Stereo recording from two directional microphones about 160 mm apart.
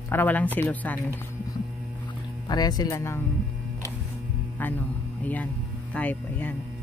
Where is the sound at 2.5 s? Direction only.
25° left (ahead or behind).